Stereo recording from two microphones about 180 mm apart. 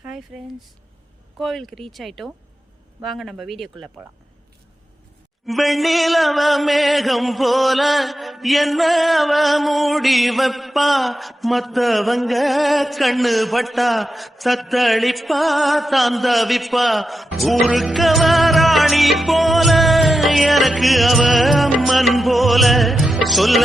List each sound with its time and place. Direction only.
0.3 s chant: 5° right (ahead or behind)
5.5 s chant: centre (ahead or behind)